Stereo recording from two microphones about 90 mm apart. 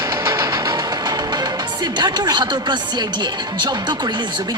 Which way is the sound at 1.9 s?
50° right (ahead or behind).